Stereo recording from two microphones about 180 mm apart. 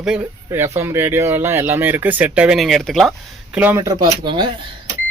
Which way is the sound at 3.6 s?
15° right (ahead or behind).